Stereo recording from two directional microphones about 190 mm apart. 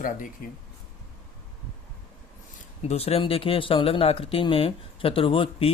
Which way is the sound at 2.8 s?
30° left (ahead or behind).